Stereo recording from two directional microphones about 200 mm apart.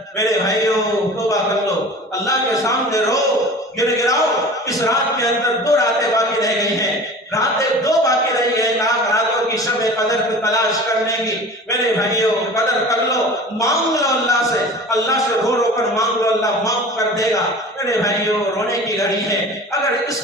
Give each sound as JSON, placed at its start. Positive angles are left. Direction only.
{"t": 0.2, "sound": "a man's voice", "side_deg": 15}
{"t": 2.2, "sound": "a man's voice", "side_deg": 15}
{"t": 7.9, "sound": "a sound", "side_deg": 15}
{"t": 11.7, "sound": "a man's voice", "side_deg": 15}
{"t": 18.7, "sound": "a man's voice", "side_deg": 15}